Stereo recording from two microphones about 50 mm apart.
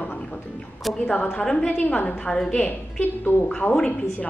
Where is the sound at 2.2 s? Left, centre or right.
Centre.